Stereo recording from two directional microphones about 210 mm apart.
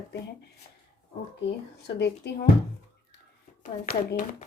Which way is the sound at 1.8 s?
55° left (ahead or behind).